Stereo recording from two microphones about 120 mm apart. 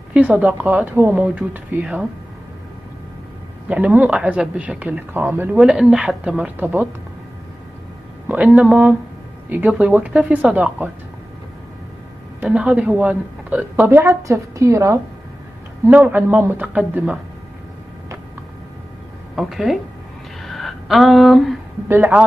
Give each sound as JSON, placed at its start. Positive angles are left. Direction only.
{"t": 0.1, "sound": "a woman's voice", "side_deg": -10}
{"t": 3.6, "sound": "a woman's voice", "side_deg": -10}
{"t": 5.6, "sound": "a woman's voice", "side_deg": -5}
{"t": 8.5, "sound": "a woman's voice", "side_deg": -10}
{"t": 12.4, "sound": "a woman's voice", "side_deg": -10}
{"t": 19.3, "sound": "speech", "side_deg": 0}
{"t": 20.4, "sound": "a sound", "side_deg": 0}
{"t": 21.8, "sound": "a woman's voice", "side_deg": -15}